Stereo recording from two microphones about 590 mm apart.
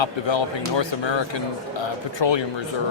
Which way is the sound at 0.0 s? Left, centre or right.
Left.